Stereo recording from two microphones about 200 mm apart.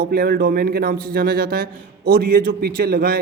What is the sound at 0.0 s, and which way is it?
A man's voice, 50° right (ahead or behind).